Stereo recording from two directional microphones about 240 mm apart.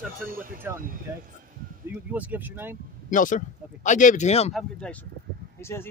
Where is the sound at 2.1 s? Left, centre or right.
Centre.